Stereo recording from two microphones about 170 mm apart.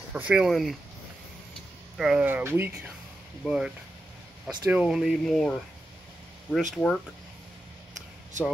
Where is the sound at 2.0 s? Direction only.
5° right (ahead or behind).